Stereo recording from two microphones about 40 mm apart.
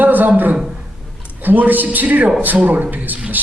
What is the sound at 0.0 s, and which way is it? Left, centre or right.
A man's voice, right.